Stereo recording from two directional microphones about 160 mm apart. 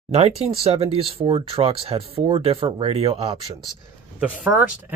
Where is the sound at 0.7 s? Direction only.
35° right (ahead or behind).